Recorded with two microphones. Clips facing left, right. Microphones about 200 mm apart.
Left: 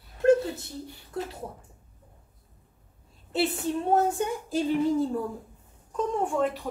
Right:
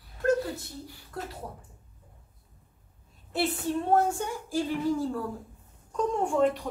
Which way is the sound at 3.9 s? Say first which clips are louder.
Left 1 dB; 20° left (ahead or behind).